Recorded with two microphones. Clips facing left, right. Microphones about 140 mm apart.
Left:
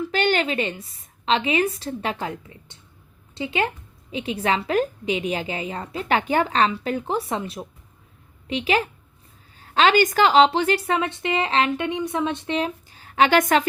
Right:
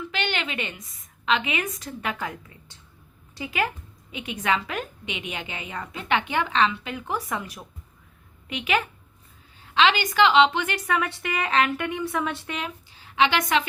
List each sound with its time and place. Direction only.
0.0 s a woman's voice: 40° left (ahead or behind)
9.6 s a woman's voice: 45° left (ahead or behind); by 12.5 s 20° left (ahead or behind)
12.9 s a sound: 45° left (ahead or behind)